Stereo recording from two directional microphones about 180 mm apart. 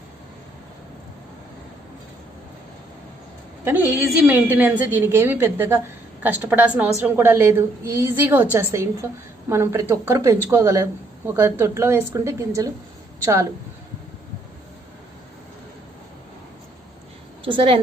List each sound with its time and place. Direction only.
3.6 s a woman's voice: 10° right (ahead or behind)
17.4 s a woman's voice: 30° right (ahead or behind)